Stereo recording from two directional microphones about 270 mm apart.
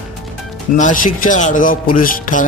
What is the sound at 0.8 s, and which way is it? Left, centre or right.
Speech, left.